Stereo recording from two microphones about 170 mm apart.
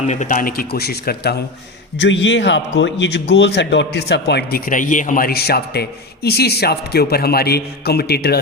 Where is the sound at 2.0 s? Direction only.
90° left.